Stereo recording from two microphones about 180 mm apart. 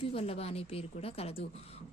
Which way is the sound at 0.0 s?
30° left (ahead or behind).